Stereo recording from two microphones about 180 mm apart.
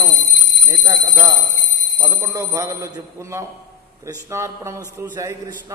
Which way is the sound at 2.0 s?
15° right (ahead or behind).